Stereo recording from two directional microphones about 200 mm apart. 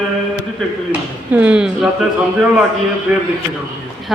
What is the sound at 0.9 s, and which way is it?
A woman's voice, 5° right (ahead or behind).